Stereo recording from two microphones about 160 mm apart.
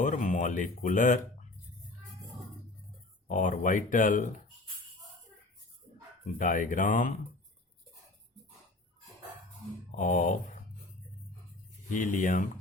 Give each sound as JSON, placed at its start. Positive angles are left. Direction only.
{"t": 0.0, "sound": "music", "side_deg": 50}
{"t": 3.2, "sound": "speech", "side_deg": 55}
{"t": 6.4, "sound": "speech", "side_deg": 55}
{"t": 9.9, "sound": "speech", "side_deg": 55}
{"t": 11.9, "sound": "speech", "side_deg": 55}